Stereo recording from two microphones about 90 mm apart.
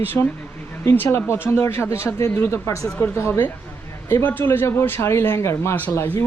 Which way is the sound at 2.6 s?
40° left (ahead or behind).